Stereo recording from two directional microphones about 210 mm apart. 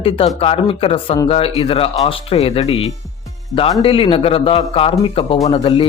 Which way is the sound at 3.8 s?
25° left (ahead or behind).